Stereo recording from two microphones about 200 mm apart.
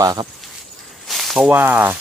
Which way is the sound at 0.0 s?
20° right (ahead or behind).